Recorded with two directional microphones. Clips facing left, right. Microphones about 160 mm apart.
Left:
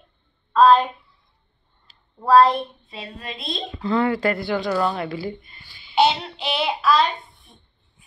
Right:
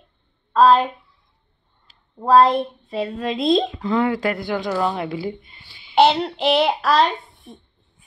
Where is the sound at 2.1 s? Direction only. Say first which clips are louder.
Right 1 dB; 20° right (ahead or behind).